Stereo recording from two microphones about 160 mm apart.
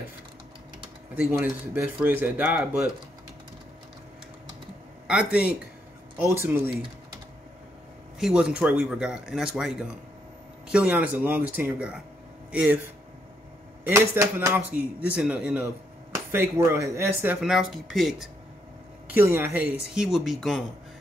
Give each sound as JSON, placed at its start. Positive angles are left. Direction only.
{"t": 1.3, "sound": "speech", "side_deg": -15}
{"t": 5.0, "sound": "a man's voice", "side_deg": -5}
{"t": 6.3, "sound": "speech", "side_deg": -15}
{"t": 8.2, "sound": "speech", "side_deg": -5}
{"t": 17.4, "sound": "speech", "side_deg": 0}
{"t": 19.0, "sound": "speech", "side_deg": -15}